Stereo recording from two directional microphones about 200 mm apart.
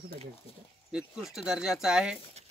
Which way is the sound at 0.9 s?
Centre (ahead or behind).